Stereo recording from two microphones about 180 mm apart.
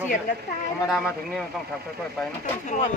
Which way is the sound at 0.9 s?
Centre (ahead or behind).